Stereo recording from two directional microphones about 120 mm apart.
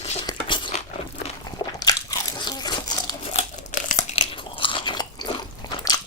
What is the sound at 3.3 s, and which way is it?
Tearing, 90° left.